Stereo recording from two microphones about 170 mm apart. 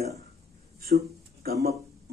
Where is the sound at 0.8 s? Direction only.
65° right (ahead or behind).